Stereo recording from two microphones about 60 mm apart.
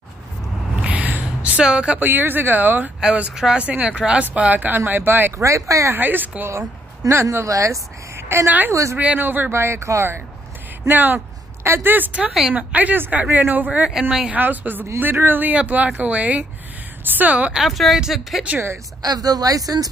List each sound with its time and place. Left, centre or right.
0.8 s a sound: right
1.6 s speech: centre
2.0 s speech: right
3.0 s speech: centre; by 5.3 s right
5.4 s speech: right
5.9 s speech: right
7.1 s speech: right
8.5 s speech: right
9.5 s speech: right
10.9 s speech: right
12.2 s speech: centre
12.5 s speech: right
17.6 s speech: centre
19.0 s speech: right